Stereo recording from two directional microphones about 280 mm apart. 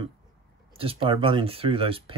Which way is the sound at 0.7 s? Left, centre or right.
Centre.